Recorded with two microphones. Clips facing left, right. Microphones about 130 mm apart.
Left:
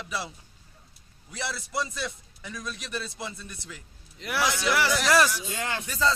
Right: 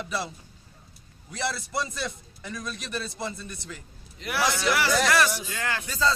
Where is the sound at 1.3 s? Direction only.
5° left (ahead or behind).